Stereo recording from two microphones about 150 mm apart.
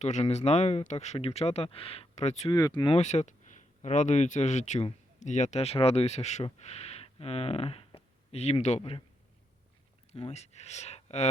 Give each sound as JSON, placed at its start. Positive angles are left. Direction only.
{"t": 0.0, "sound": "speech", "side_deg": 50}
{"t": 2.5, "sound": "speech", "side_deg": 25}
{"t": 2.9, "sound": "speech", "side_deg": 50}
{"t": 10.1, "sound": "speech", "side_deg": 45}